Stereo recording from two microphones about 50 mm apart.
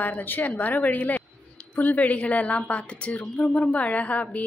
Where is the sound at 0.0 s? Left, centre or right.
Left.